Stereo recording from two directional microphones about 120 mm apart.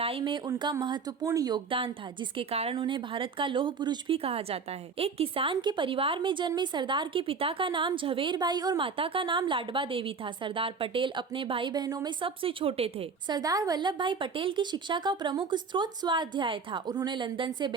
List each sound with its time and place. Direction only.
0.0 s speech: 45° right (ahead or behind)
2.5 s a woman's voice: 55° right (ahead or behind)
4.2 s a woman's voice: 55° right (ahead or behind); by 8.8 s 35° right (ahead or behind)
8.8 s a woman's voice: 45° right (ahead or behind)
12.2 s a woman's voice: 50° right (ahead or behind)
13.2 s speech: 35° right (ahead or behind)